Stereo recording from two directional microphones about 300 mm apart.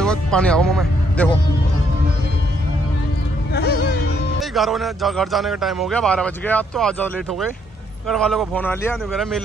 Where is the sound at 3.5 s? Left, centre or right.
Left.